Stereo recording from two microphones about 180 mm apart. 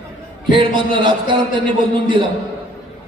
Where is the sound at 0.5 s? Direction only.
25° right (ahead or behind).